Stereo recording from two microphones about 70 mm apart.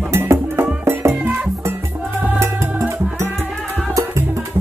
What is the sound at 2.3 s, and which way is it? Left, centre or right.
Music, right.